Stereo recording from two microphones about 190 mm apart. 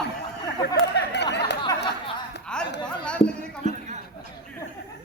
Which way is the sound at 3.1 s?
5° left (ahead or behind).